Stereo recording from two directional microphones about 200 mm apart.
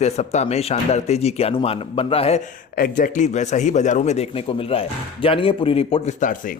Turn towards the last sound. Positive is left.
turn(degrees=35)  # may be behind; listen again after turning